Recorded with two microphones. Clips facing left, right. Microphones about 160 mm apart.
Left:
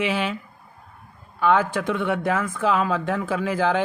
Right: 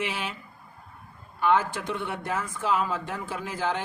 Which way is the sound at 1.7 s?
90° left.